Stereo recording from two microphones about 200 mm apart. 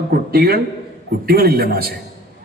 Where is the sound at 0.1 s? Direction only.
50° right (ahead or behind).